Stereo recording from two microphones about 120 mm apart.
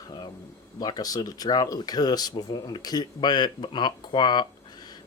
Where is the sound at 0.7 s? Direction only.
35° left (ahead or behind).